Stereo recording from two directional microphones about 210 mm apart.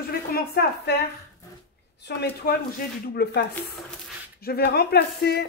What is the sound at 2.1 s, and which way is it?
Speech, 50° left (ahead or behind).